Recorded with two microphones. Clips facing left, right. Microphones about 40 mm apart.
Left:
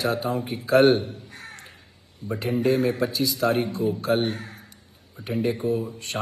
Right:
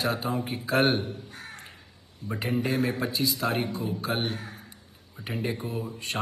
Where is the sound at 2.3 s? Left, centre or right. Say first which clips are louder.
Left 5 dB; right; by 4.2 s centre.